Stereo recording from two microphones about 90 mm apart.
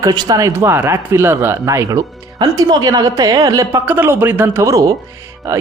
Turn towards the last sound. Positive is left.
turn(degrees=-35)  # may be behind; listen again after turning